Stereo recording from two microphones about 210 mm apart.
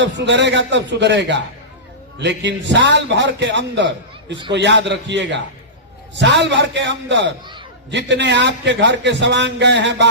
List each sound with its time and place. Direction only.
0.0 s a man's voice: 55° right (ahead or behind)